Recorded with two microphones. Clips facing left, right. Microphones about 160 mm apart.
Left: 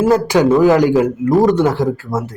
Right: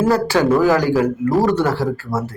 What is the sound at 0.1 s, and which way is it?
A man's voice, 20° left (ahead or behind).